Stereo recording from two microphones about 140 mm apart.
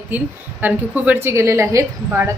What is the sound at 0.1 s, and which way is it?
A woman's voice, 10° right (ahead or behind).